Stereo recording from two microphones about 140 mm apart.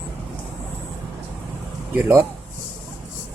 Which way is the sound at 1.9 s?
15° right (ahead or behind).